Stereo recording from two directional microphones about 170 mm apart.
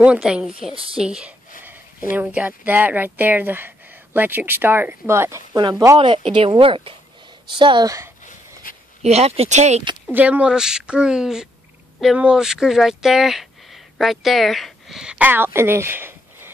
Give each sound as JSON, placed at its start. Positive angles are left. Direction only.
{"t": 0.0, "sound": "a woman's voice", "side_deg": -5}
{"t": 1.6, "sound": "a sound", "side_deg": -10}
{"t": 2.1, "sound": "a woman's voice", "side_deg": -10}
{"t": 8.6, "sound": "a sound", "side_deg": 55}
{"t": 9.0, "sound": "speech", "side_deg": -40}
{"t": 10.1, "sound": "a woman's voice", "side_deg": -10}